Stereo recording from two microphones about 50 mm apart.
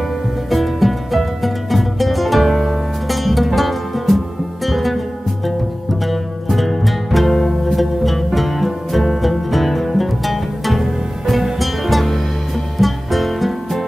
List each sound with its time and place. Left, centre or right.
0.5 s music: centre